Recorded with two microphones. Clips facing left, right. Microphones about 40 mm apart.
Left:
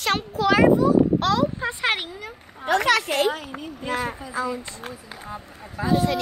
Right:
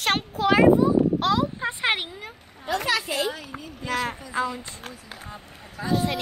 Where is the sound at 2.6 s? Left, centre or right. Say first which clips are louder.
Left 5 dB; left.